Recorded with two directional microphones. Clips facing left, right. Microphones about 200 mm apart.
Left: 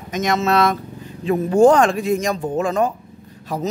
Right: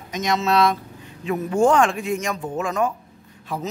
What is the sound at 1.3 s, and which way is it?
A man's voice, 30° left (ahead or behind).